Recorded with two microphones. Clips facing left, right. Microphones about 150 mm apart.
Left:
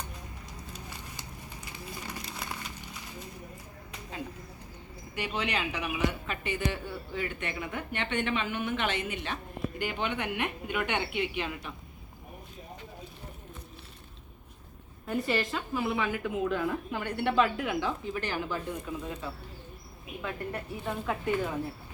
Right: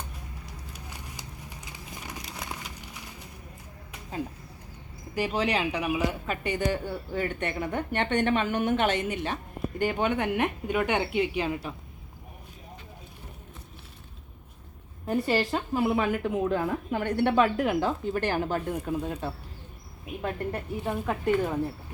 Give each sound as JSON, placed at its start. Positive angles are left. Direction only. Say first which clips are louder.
{"t": 0.7, "sound": "a sound", "louder": "even", "side_deg": -15}
{"t": 5.1, "sound": "speech", "louder": "right 6 dB", "side_deg": -40}
{"t": 15.0, "sound": "speech", "louder": "right 4 dB", "side_deg": -35}
{"t": 20.2, "sound": "speech", "louder": "right 4 dB", "side_deg": -35}